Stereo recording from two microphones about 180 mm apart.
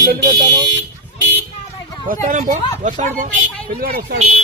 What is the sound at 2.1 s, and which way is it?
A man's voice, 45° right (ahead or behind).